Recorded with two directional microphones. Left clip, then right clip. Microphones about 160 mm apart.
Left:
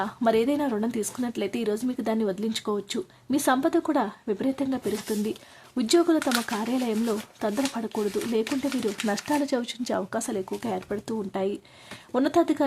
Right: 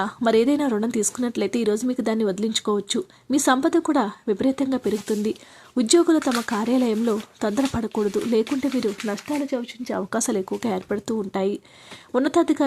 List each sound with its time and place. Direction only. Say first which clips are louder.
0.0 s speech: right 4 dB; 25° right (ahead or behind); by 9.9 s 5° right (ahead or behind)
9.9 s speech: right 4 dB; 25° right (ahead or behind)